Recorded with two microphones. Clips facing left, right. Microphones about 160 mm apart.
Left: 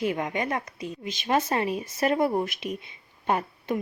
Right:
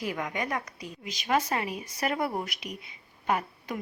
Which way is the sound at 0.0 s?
25° left (ahead or behind).